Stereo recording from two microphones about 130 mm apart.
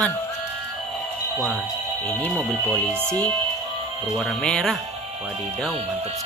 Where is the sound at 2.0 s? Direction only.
10° left (ahead or behind).